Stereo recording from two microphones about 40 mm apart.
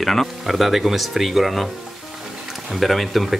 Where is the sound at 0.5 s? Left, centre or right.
Centre.